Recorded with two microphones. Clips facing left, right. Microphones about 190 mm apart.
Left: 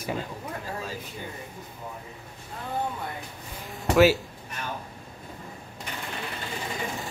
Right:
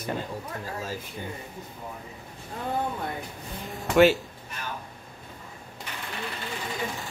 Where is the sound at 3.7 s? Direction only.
Centre (ahead or behind).